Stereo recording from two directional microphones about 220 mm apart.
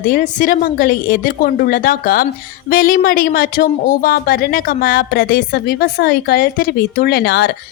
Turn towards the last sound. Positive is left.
turn(degrees=50)  # may be behind; listen again after turning